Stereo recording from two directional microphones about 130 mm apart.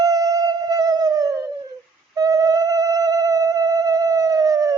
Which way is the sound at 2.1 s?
30° right (ahead or behind).